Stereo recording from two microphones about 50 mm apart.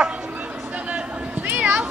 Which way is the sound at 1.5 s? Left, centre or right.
Right.